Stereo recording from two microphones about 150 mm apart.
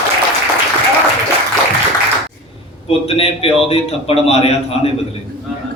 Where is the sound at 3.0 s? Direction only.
40° left (ahead or behind).